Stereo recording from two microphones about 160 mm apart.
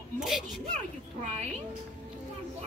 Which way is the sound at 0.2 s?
Centre (ahead or behind).